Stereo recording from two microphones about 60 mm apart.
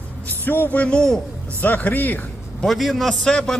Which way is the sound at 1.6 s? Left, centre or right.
Left.